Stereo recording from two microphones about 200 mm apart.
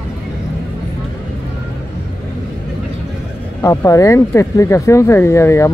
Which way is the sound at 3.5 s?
15° left (ahead or behind).